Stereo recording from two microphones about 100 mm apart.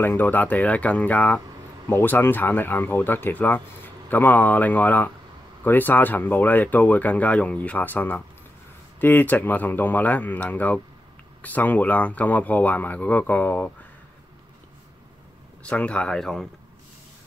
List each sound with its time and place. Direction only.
0.0 s speech: 20° left (ahead or behind)
15.6 s speech: 10° left (ahead or behind)